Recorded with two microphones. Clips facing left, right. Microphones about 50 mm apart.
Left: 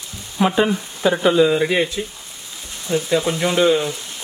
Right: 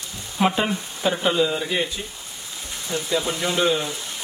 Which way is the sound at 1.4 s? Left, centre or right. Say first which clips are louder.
Left 7 dB; left.